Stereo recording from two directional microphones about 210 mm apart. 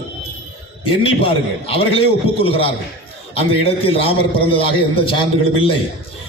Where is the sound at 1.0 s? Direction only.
25° left (ahead or behind).